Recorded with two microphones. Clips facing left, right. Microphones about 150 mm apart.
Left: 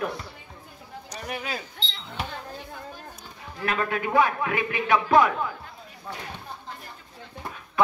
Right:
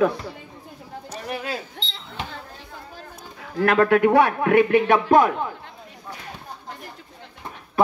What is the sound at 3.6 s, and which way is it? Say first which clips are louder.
A man's voice: right 11 dB; 65° right (ahead or behind).